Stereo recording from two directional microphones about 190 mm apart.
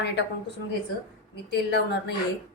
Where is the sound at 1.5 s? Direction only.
65° left (ahead or behind).